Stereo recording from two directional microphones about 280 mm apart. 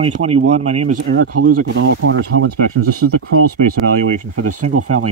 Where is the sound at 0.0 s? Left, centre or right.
Right.